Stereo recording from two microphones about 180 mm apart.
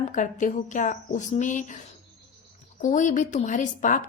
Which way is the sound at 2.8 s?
45° left (ahead or behind).